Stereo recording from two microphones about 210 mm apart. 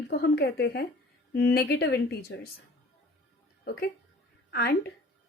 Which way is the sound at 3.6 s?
50° left (ahead or behind).